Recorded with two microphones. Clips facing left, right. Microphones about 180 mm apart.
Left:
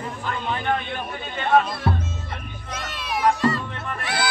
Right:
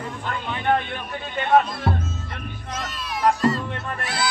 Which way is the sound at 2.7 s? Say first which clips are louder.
Left 1 dB; 65° left (ahead or behind).